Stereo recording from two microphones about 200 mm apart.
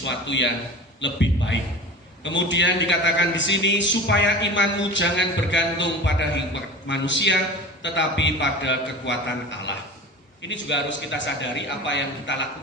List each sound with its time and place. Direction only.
0.0 s a man's voice: 65° left (ahead or behind)